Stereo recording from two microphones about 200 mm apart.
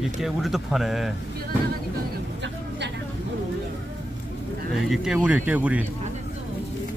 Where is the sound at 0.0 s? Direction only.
Centre (ahead or behind).